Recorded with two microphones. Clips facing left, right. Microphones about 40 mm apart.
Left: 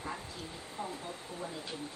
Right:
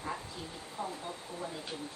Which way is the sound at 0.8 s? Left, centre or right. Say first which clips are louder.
Right 1 dB; right.